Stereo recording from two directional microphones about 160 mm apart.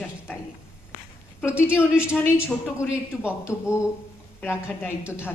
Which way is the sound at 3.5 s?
15° left (ahead or behind).